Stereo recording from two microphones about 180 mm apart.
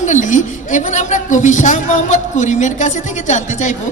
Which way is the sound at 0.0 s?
45° left (ahead or behind).